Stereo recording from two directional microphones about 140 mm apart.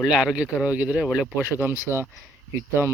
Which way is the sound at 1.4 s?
15° right (ahead or behind).